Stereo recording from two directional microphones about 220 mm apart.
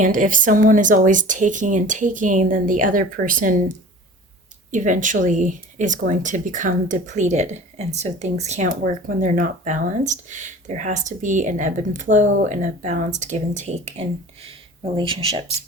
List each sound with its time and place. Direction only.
0.0 s speech: 35° right (ahead or behind)
4.7 s speech: 35° right (ahead or behind)